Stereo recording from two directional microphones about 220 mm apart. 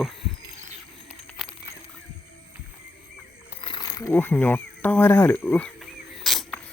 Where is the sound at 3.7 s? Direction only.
20° left (ahead or behind).